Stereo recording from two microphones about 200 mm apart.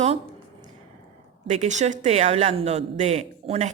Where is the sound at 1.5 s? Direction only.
35° right (ahead or behind).